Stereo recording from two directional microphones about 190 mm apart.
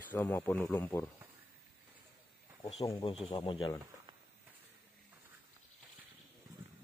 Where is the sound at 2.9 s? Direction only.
25° left (ahead or behind).